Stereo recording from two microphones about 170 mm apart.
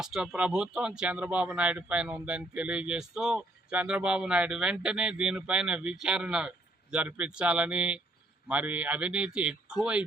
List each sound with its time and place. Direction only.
0.0 s a man's voice: 5° right (ahead or behind)